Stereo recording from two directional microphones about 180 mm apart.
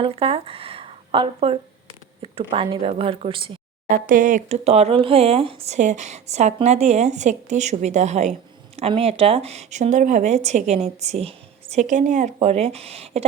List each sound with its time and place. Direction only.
0.0 s speech: 30° right (ahead or behind)
3.8 s speech: 45° right (ahead or behind)